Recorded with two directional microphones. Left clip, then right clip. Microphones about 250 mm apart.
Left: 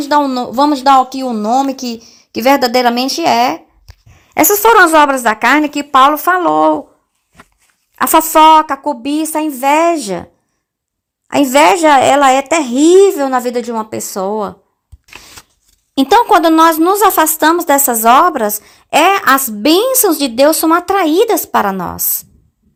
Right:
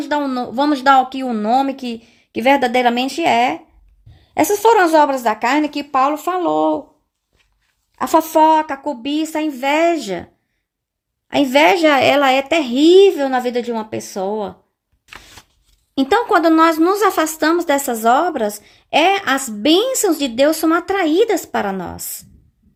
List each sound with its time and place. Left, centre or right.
0.0 s a woman's voice: centre
8.3 s a woman's voice: centre
11.4 s a woman's voice: centre
16.0 s a woman's voice: centre